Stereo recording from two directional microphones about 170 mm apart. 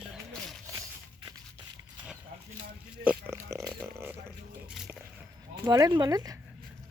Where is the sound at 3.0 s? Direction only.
10° right (ahead or behind).